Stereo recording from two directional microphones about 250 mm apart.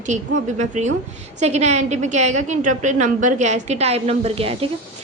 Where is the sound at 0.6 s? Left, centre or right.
Right.